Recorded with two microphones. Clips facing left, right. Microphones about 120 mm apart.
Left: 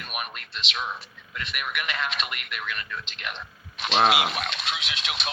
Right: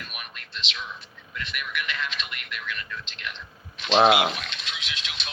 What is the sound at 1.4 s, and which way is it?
Speech, 55° left (ahead or behind).